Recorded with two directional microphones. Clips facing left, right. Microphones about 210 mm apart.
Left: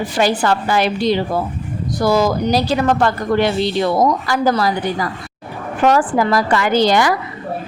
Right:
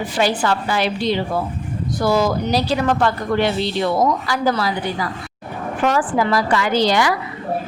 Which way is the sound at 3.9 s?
40° left (ahead or behind).